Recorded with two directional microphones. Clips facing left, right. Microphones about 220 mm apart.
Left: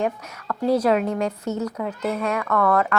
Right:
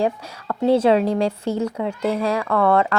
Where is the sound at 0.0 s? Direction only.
25° right (ahead or behind).